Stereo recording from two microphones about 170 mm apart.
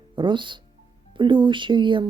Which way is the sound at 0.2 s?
30° right (ahead or behind).